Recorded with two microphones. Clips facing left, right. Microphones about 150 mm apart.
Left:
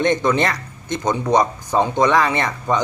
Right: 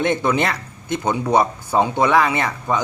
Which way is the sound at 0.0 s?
10° right (ahead or behind).